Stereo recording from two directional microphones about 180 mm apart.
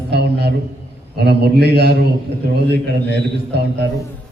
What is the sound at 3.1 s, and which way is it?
Speech, 65° right (ahead or behind).